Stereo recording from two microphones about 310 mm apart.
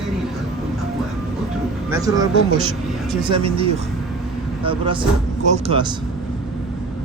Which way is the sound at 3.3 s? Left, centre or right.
Centre.